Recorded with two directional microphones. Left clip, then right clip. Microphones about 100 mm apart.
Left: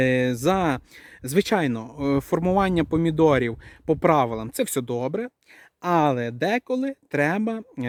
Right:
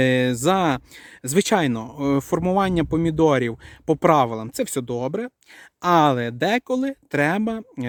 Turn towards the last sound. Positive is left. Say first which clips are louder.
# right 2 dB
turn(degrees=-35)  # may be behind; listen again after turning